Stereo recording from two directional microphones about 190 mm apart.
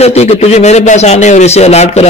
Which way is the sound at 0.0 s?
35° left (ahead or behind).